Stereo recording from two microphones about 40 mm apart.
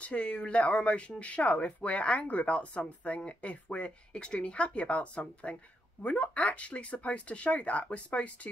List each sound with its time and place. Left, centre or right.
0.0 s speech: left